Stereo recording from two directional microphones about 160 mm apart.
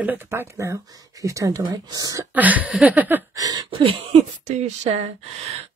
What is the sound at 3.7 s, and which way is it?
Speech, 35° right (ahead or behind).